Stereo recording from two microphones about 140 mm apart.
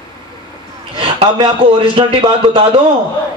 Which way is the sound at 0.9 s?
35° right (ahead or behind).